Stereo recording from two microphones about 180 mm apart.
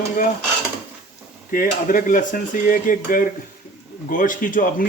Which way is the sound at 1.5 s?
50° left (ahead or behind).